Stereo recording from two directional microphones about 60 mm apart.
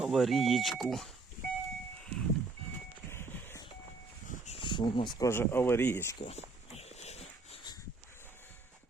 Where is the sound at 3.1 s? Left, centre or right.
Left.